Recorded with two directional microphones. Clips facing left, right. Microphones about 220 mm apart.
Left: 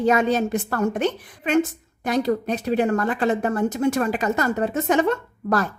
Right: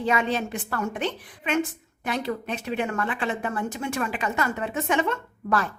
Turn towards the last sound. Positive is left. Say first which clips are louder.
# left 4 dB
turn(degrees=40)  # may be behind; listen again after turning